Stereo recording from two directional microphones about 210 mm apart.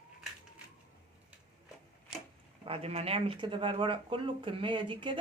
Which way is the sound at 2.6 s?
30° right (ahead or behind).